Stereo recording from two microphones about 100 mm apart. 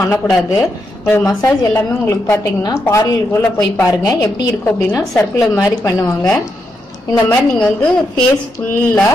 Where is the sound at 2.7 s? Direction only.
30° left (ahead or behind).